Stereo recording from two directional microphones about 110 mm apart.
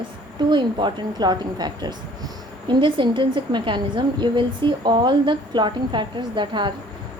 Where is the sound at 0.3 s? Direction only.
45° right (ahead or behind).